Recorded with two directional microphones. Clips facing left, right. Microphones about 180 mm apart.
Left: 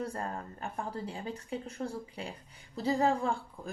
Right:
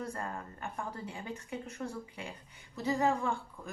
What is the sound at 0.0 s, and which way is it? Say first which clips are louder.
Speech: left 2 dB; 30° left (ahead or behind).